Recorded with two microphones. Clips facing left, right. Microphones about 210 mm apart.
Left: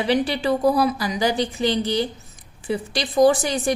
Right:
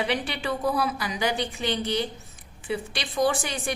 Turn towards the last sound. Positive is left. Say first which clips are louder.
# left 8 dB
turn(degrees=40)  # may be behind; listen again after turning